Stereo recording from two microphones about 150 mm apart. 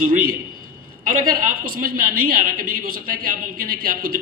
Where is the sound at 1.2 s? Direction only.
70° right (ahead or behind).